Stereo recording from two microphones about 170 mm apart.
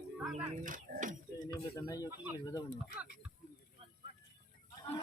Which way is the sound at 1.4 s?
20° left (ahead or behind).